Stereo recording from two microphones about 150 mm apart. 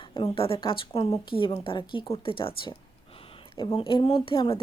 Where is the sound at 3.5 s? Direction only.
35° left (ahead or behind).